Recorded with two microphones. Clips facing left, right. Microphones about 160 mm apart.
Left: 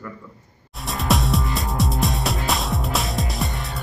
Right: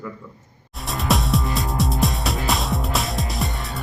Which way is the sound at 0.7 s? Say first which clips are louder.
Even; centre (ahead or behind).